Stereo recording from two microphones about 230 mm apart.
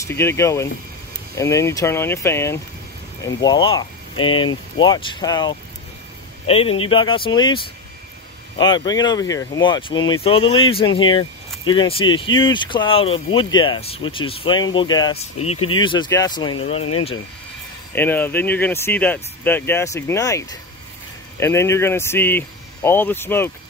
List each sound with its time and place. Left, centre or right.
0.0 s speech: centre
17.9 s speech: centre